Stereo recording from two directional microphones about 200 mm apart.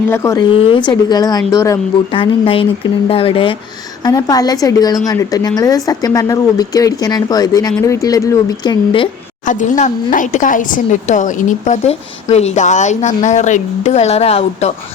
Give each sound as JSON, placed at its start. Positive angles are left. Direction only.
{"t": 0.1, "sound": "speech", "side_deg": 15}
{"t": 0.5, "sound": "speech", "side_deg": 25}
{"t": 9.5, "sound": "speech", "side_deg": 40}